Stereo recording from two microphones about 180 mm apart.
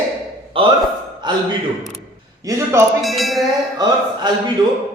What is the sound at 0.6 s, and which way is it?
Speech, 30° right (ahead or behind).